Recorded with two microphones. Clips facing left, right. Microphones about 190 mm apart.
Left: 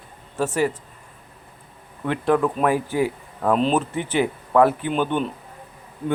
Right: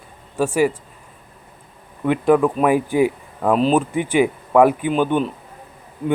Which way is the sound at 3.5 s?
5° right (ahead or behind).